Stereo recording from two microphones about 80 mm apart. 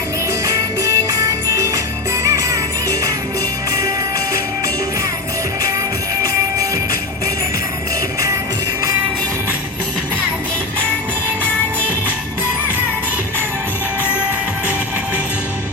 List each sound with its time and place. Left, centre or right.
0.4 s music: right